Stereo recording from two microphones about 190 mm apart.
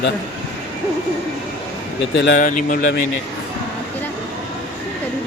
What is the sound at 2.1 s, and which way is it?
Speech, 65° left (ahead or behind).